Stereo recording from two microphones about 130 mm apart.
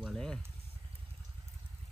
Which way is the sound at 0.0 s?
5° left (ahead or behind).